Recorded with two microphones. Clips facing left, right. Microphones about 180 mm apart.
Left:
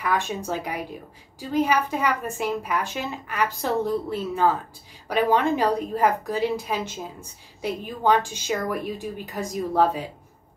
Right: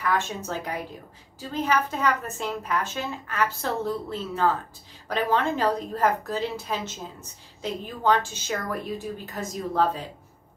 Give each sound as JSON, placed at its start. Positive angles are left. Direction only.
{"t": 0.0, "sound": "a woman's voice", "side_deg": 10}